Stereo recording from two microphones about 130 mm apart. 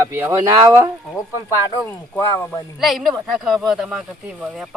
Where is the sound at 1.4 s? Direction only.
15° left (ahead or behind).